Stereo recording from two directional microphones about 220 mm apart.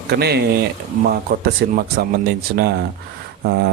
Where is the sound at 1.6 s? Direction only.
50° right (ahead or behind).